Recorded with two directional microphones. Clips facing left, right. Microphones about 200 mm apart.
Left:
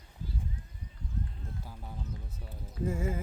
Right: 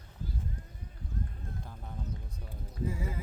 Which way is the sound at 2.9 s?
50° left (ahead or behind).